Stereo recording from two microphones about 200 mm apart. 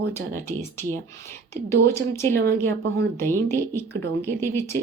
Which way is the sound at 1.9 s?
15° left (ahead or behind).